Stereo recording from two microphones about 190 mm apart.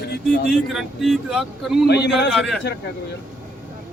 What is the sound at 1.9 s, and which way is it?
Speech, 60° left (ahead or behind).